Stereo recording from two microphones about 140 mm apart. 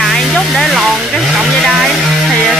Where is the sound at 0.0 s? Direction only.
Centre (ahead or behind).